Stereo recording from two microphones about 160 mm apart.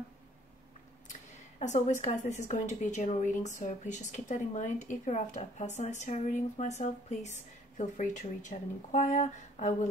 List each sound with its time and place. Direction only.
1.6 s a woman's voice: 50° left (ahead or behind)